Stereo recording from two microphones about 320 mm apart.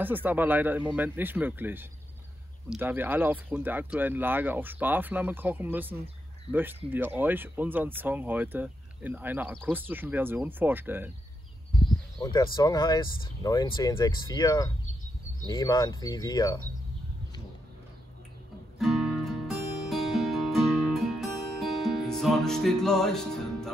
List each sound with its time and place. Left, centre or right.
0.0 s speech: centre
12.2 s speech: centre
18.8 s music: centre